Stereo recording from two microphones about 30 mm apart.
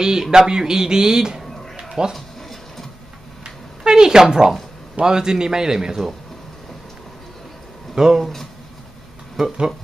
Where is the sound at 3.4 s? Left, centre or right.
Right.